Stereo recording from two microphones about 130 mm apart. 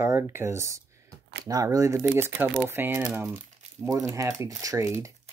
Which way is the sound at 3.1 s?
15° right (ahead or behind).